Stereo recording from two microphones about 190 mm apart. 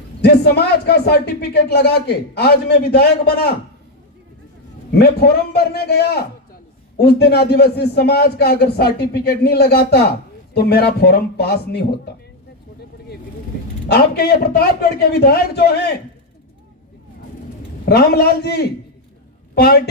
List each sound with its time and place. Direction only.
0.2 s speech: 60° left (ahead or behind)
4.9 s speech: 55° left (ahead or behind)
13.9 s speech: 55° left (ahead or behind)
17.8 s speech: 55° left (ahead or behind)
19.5 s a woman's voice: 55° left (ahead or behind)